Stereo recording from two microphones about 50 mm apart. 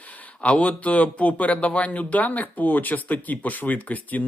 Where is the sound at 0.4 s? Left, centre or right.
Left.